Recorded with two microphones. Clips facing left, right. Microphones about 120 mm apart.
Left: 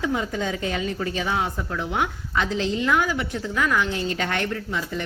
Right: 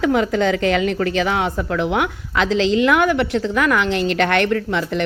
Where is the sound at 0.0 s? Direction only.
80° right.